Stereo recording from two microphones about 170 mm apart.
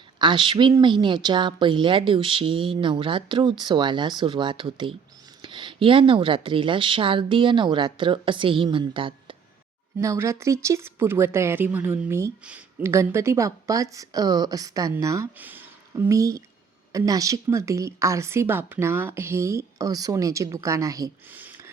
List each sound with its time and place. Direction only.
0.2 s speech: 30° right (ahead or behind)
10.0 s a woman's voice: 15° right (ahead or behind)